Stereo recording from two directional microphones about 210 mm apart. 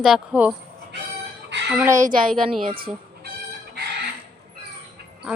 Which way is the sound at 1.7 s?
10° right (ahead or behind).